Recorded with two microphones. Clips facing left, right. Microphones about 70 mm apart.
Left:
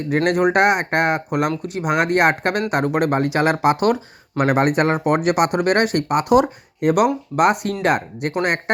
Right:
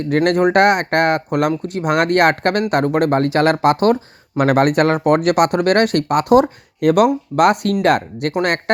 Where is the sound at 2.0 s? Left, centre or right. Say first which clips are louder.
Right 3 dB; right.